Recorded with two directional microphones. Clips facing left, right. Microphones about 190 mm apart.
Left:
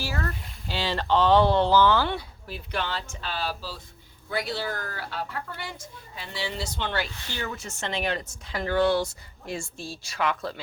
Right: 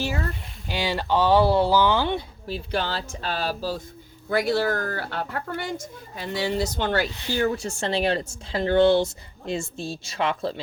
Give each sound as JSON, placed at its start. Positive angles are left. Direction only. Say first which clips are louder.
{"t": 0.7, "sound": "speech", "louder": "right 1 dB", "side_deg": -15}
{"t": 2.5, "sound": "a woman's voice", "louder": "right 4 dB", "side_deg": -35}